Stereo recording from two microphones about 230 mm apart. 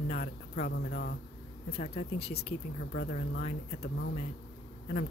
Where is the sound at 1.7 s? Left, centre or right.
Left.